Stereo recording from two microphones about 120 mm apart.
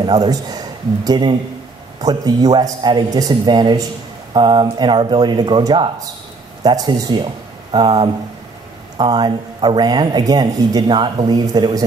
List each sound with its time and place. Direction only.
0.0 s speech: 40° right (ahead or behind)